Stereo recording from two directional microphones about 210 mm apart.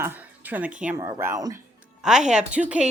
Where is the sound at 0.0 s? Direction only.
10° right (ahead or behind).